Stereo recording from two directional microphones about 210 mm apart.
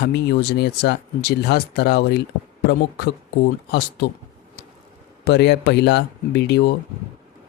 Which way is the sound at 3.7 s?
50° left (ahead or behind).